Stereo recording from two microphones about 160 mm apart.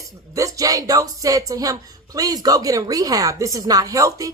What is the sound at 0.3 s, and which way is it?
A woman's voice, 20° right (ahead or behind).